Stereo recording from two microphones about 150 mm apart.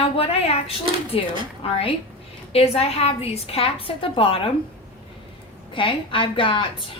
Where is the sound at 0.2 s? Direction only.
40° left (ahead or behind).